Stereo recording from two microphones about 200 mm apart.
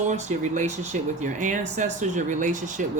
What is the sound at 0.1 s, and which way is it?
Speech, 35° right (ahead or behind).